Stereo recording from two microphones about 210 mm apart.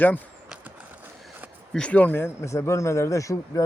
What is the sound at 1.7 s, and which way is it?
Speech, 5° left (ahead or behind).